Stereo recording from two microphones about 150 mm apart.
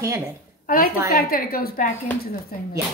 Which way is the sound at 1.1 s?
70° left (ahead or behind).